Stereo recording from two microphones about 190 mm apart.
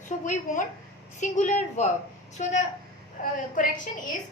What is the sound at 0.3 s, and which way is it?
A woman's voice, 40° left (ahead or behind).